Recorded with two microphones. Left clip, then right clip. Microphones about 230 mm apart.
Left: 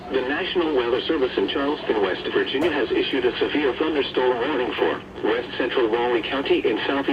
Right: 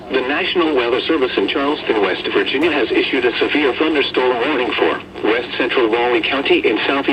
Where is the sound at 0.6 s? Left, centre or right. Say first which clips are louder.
Right 4 dB; right.